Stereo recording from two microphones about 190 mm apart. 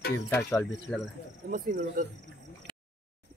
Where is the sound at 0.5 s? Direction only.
Centre (ahead or behind).